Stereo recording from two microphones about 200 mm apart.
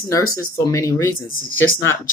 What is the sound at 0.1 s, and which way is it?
Speech, 15° left (ahead or behind).